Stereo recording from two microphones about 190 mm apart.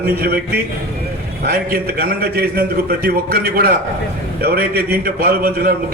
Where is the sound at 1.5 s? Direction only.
55° right (ahead or behind).